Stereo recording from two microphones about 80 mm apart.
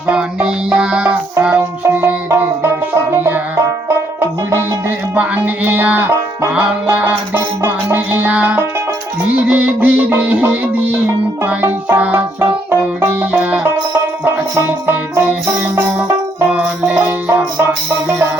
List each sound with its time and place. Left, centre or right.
0.1 s music: centre; by 2.5 s right
2.9 s banjo: right
5.1 s music: right
14.7 s music: right